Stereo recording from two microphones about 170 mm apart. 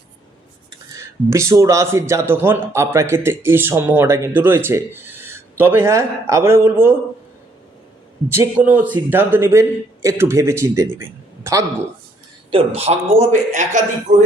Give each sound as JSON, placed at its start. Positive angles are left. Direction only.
{"t": 0.9, "sound": "speech", "side_deg": -15}
{"t": 8.3, "sound": "speech", "side_deg": -10}
{"t": 12.5, "sound": "speech", "side_deg": -35}